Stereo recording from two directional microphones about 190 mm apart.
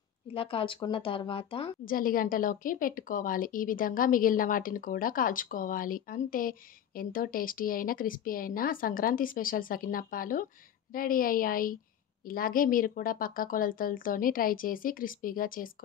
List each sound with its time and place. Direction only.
0.3 s speech: 30° left (ahead or behind)
1.9 s a woman's voice: 50° left (ahead or behind)